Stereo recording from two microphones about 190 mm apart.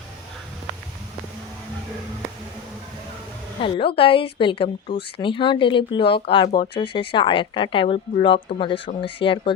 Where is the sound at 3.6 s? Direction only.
30° left (ahead or behind).